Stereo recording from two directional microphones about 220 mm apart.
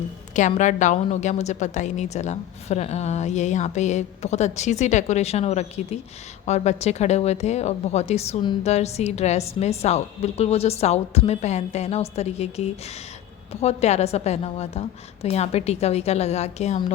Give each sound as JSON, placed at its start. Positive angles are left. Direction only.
{"t": 0.3, "sound": "a woman's voice", "side_deg": 35}